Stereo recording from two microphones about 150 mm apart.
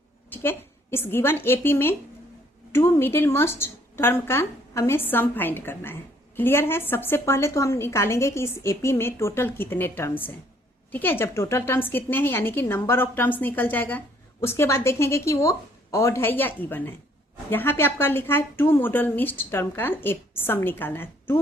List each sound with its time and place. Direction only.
0.3 s a woman's voice: 15° left (ahead or behind)